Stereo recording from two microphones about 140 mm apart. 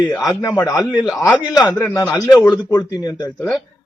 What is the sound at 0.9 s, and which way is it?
Speech, 5° right (ahead or behind).